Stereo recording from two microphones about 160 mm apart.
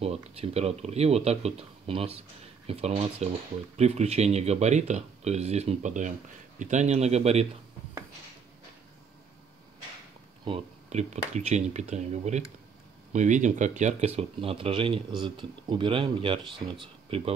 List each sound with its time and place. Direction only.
0.0 s speech: 40° right (ahead or behind)
10.4 s speech: 40° right (ahead or behind)